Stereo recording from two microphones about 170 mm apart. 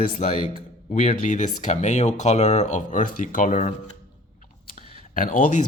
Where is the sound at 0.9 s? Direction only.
40° left (ahead or behind).